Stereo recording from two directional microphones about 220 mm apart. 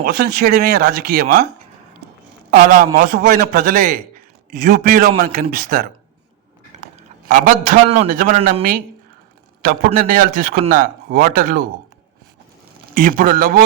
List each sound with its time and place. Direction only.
0.0 s speech: 45° right (ahead or behind)
2.5 s a man's voice: 40° right (ahead or behind)
7.3 s a man's voice: 40° right (ahead or behind)
9.6 s a man's voice: 40° right (ahead or behind)
12.9 s a man's voice: 40° right (ahead or behind)